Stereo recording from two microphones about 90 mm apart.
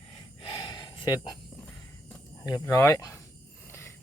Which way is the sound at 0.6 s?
55° left (ahead or behind).